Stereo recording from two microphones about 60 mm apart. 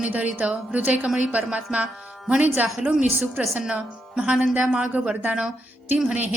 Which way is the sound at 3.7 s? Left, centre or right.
Centre.